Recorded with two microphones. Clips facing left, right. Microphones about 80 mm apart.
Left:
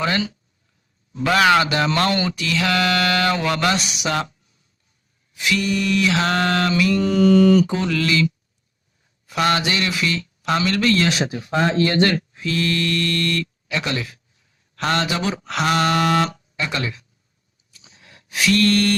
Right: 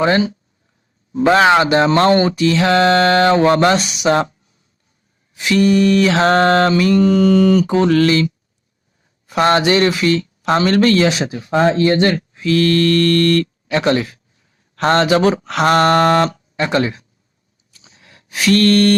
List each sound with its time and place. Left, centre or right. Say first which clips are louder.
0.0 s speech: right 8 dB; right
5.3 s mantra: right 8 dB; right
9.2 s speech: right 6 dB; right
11.5 s speech: right 5 dB; right
12.5 s mantra: right 9 dB; right
17.7 s a sound: right 1 dB; right